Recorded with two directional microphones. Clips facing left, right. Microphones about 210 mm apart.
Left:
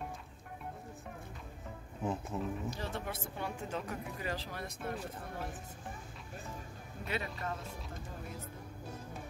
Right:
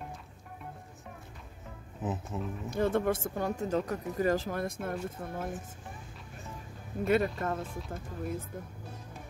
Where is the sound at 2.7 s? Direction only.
55° right (ahead or behind).